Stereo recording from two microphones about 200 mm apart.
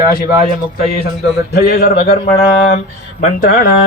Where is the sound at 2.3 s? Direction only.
30° left (ahead or behind).